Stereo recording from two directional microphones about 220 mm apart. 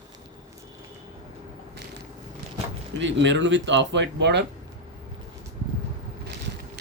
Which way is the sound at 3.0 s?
55° right (ahead or behind).